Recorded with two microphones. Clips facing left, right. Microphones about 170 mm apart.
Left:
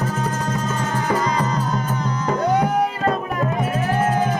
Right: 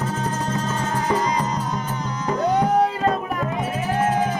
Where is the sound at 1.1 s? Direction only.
20° right (ahead or behind).